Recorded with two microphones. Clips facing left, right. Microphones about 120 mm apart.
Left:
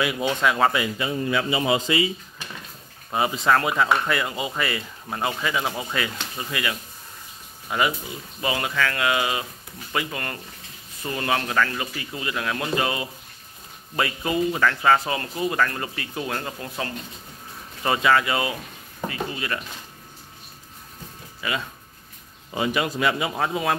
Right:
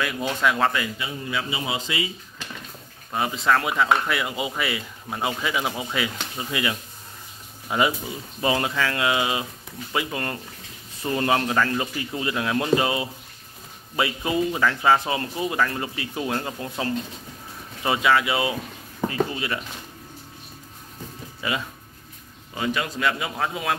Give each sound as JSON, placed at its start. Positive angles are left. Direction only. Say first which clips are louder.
{"t": 0.0, "sound": "a man's voice", "louder": "left 3 dB", "side_deg": 10}
{"t": 0.4, "sound": "speech", "louder": "even", "side_deg": 0}
{"t": 0.9, "sound": "a man's voice", "louder": "left 5 dB", "side_deg": 55}
{"t": 3.1, "sound": "speech", "louder": "left 1 dB", "side_deg": 5}
{"t": 6.5, "sound": "speech", "louder": "right 2 dB", "side_deg": -20}
{"t": 17.8, "sound": "speech", "louder": "even", "side_deg": -5}
{"t": 19.0, "sound": "speech", "louder": "right 5 dB", "side_deg": -25}
{"t": 21.4, "sound": "speech", "louder": "right 1 dB", "side_deg": -25}
{"t": 22.5, "sound": "a man's voice", "louder": "left 2 dB", "side_deg": 15}